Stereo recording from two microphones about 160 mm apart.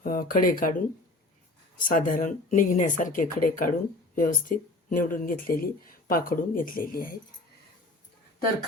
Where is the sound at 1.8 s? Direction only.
55° left (ahead or behind).